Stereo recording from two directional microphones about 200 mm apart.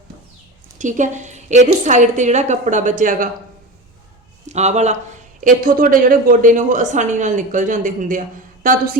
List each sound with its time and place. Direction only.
0.8 s speech: 40° right (ahead or behind)
4.4 s speech: 35° right (ahead or behind)
8.6 s a sound: 45° right (ahead or behind)